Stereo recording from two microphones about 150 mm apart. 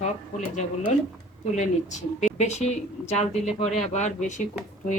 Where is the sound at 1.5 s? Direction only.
50° left (ahead or behind).